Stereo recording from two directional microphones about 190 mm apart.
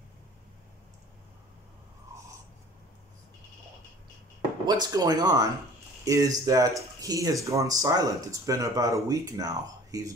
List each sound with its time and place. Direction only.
4.6 s speech: 20° right (ahead or behind)